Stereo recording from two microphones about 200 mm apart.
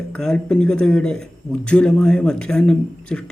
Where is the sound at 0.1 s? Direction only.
5° left (ahead or behind).